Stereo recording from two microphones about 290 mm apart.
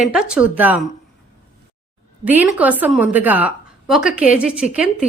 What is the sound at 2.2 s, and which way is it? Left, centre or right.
Speech, centre.